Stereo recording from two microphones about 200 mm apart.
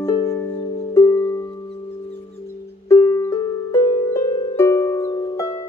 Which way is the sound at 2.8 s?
15° left (ahead or behind).